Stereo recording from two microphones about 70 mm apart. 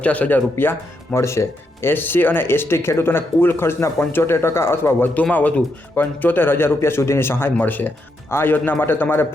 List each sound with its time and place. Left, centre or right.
0.0 s speech: left
0.5 s speech: left